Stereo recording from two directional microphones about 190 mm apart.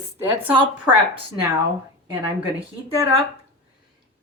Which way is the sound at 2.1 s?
10° right (ahead or behind).